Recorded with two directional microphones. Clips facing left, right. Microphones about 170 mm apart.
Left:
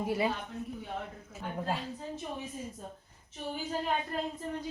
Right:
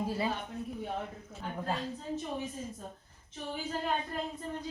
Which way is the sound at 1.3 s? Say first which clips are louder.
Left 2 dB; 10° left (ahead or behind).